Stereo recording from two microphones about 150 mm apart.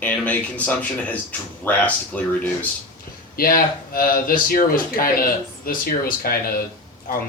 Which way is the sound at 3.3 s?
75° left (ahead or behind).